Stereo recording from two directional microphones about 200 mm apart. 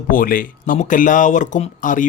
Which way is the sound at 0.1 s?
45° left (ahead or behind).